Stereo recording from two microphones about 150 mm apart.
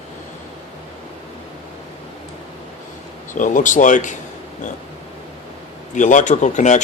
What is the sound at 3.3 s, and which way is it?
Speech, 60° left (ahead or behind).